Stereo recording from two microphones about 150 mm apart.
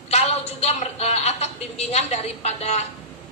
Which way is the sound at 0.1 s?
45° left (ahead or behind).